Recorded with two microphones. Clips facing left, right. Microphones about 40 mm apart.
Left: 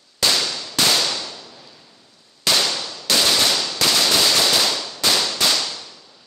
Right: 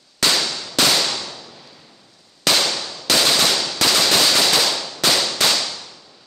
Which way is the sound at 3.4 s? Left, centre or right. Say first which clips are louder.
Right 1 dB; centre.